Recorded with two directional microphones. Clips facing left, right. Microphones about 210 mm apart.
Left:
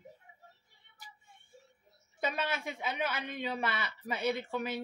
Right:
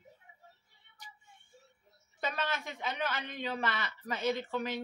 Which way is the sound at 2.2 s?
10° left (ahead or behind).